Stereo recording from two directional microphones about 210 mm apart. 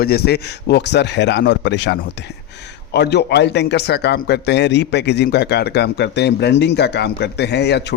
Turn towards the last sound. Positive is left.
turn(degrees=55)  # may be behind; listen again after turning